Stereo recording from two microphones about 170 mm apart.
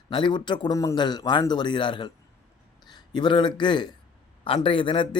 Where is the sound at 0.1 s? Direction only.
30° left (ahead or behind).